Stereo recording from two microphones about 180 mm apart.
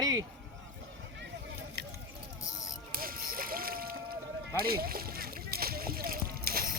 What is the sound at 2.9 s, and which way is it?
Boat, 55° right (ahead or behind).